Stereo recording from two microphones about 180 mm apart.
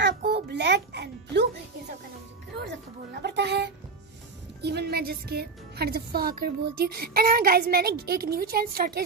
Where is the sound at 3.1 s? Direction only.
70° right (ahead or behind).